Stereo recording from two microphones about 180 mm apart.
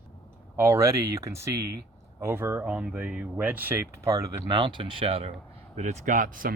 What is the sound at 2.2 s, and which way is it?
Speech, 15° right (ahead or behind).